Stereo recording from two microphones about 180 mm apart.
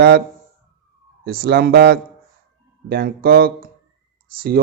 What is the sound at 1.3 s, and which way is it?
Speech, 60° right (ahead or behind).